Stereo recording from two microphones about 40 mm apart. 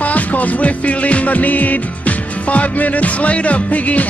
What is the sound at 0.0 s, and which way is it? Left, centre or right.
Music, left.